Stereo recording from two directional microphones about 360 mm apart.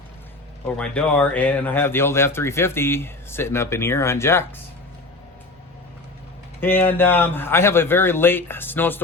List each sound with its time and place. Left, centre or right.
0.8 s speech: centre
6.6 s speech: centre